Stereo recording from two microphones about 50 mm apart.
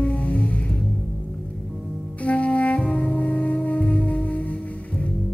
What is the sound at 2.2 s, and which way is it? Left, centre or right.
Music, left.